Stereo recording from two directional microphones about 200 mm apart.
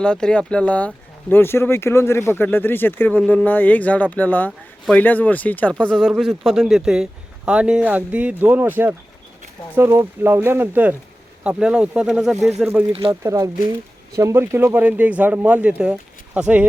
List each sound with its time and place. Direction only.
0.0 s speech: 5° left (ahead or behind)
12.9 s speech: 25° right (ahead or behind)
13.2 s speech: 15° right (ahead or behind)